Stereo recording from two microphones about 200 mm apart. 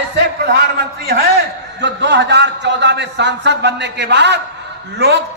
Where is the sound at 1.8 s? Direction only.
60° right (ahead or behind).